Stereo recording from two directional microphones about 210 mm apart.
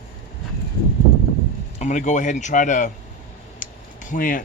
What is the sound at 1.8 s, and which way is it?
Speech, 35° left (ahead or behind).